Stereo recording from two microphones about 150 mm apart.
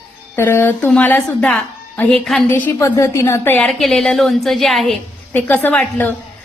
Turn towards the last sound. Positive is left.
turn(degrees=10)  # may be behind; listen again after turning